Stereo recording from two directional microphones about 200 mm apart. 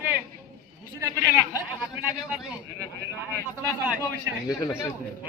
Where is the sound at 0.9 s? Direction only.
15° right (ahead or behind).